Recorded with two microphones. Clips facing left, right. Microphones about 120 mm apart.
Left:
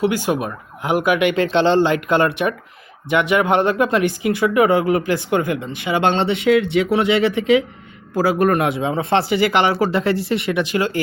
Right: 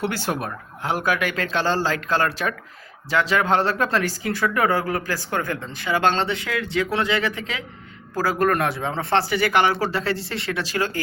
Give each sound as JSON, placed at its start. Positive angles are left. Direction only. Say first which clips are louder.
{"t": 0.0, "sound": "speech", "louder": "left 6 dB", "side_deg": 10}